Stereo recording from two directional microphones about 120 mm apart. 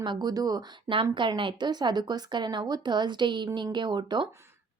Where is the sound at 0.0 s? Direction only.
35° right (ahead or behind).